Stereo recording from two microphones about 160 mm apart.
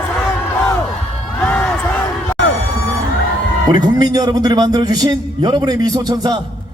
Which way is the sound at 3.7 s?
25° right (ahead or behind).